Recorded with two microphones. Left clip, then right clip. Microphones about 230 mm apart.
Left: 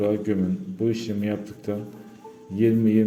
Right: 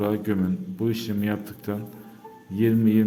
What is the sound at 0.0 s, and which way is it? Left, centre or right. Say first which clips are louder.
A man's voice: left 2 dB; right.